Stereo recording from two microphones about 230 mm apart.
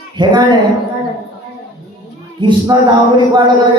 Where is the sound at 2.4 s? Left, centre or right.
Centre.